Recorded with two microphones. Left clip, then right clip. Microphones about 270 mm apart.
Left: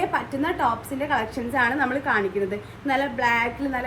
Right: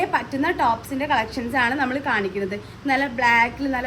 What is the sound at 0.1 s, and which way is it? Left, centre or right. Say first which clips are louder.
A woman's voice: right 3 dB; right.